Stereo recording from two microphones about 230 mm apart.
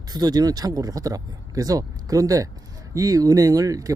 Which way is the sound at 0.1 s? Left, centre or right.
Centre.